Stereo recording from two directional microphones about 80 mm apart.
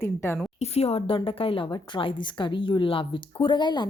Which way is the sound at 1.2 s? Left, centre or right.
Left.